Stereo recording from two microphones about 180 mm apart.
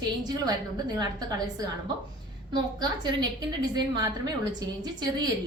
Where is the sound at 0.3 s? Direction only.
25° right (ahead or behind).